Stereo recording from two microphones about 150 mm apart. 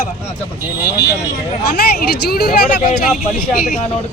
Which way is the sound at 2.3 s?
90° left.